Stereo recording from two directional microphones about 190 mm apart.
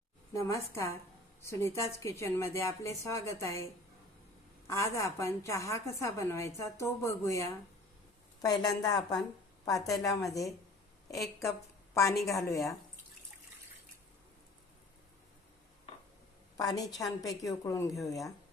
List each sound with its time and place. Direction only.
0.3 s a woman's voice: 15° left (ahead or behind)
4.7 s a woman's voice: 15° left (ahead or behind)
11.9 s a woman's voice: 15° left (ahead or behind)
16.6 s a woman's voice: 20° left (ahead or behind)